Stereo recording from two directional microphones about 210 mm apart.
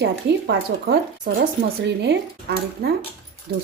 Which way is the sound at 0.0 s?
50° right (ahead or behind).